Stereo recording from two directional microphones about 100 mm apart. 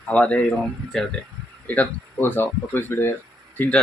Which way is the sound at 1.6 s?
15° left (ahead or behind).